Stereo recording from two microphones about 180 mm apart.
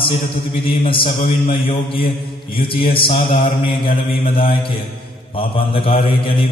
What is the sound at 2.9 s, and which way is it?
Mantra, 30° left (ahead or behind).